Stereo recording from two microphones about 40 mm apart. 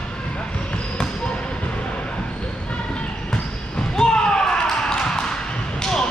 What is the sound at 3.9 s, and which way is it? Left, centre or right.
Basketball bounce, centre.